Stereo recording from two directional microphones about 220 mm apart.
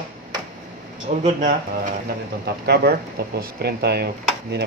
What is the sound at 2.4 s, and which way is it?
Speech, 45° right (ahead or behind).